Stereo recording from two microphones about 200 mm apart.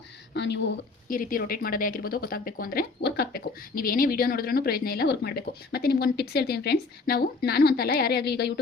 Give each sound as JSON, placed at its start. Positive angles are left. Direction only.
{"t": 0.3, "sound": "speech", "side_deg": 60}
{"t": 1.0, "sound": "speech", "side_deg": 45}